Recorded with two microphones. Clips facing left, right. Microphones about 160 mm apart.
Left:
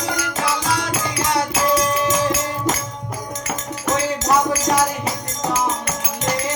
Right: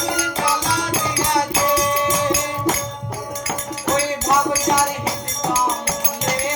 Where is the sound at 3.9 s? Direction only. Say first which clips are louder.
Left 1 dB; 25° right (ahead or behind).